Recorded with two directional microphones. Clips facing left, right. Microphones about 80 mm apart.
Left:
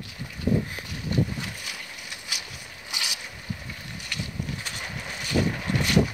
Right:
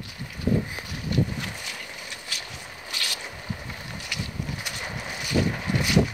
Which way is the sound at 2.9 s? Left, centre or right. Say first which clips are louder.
Even; centre.